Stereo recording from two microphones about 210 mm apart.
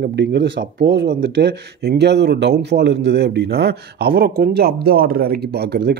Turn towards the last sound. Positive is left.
turn(degrees=-50)  # may be behind; listen again after turning